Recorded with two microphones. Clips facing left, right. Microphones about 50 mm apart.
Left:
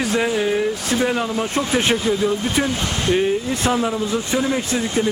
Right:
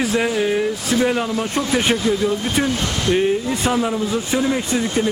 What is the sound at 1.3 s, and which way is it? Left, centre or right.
Speech, centre.